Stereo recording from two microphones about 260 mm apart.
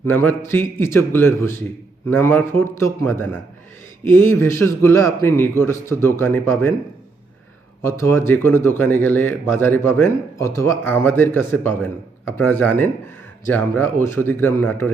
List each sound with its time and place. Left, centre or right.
0.4 s speech: centre
7.8 s speech: centre